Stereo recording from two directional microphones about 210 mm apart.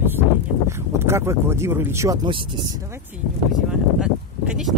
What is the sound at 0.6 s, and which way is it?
Speech, 10° right (ahead or behind).